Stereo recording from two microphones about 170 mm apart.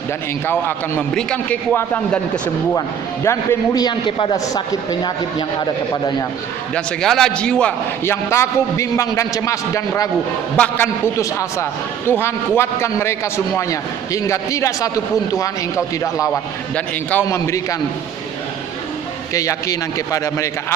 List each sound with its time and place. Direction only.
0.4 s a man's voice: 10° left (ahead or behind)
3.2 s a man's voice: 20° left (ahead or behind)
6.7 s a man's voice: centre (ahead or behind); by 16.4 s 20° left (ahead or behind)
16.7 s a man's voice: 10° left (ahead or behind)
19.3 s a man's voice: 20° left (ahead or behind)